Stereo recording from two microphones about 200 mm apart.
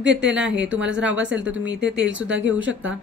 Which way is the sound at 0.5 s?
70° right (ahead or behind).